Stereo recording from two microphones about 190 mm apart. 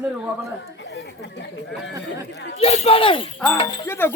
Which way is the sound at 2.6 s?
35° left (ahead or behind).